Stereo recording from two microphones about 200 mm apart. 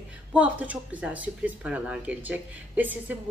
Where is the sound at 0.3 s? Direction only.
5° right (ahead or behind).